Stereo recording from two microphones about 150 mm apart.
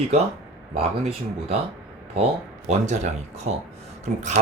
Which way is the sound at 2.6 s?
50° right (ahead or behind).